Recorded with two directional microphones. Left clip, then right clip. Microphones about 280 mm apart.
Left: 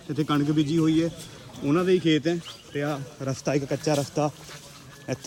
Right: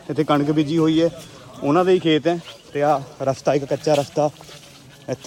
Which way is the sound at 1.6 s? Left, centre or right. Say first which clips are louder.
Right 7 dB; right.